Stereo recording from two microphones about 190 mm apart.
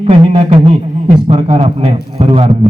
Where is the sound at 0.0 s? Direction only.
30° right (ahead or behind).